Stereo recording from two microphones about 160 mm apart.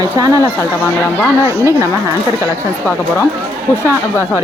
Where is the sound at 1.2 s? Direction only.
15° left (ahead or behind).